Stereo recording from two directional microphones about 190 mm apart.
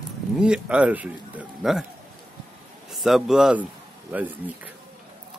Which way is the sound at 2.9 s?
Centre (ahead or behind).